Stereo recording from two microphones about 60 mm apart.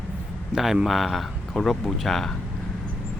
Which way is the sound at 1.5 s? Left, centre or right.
Centre.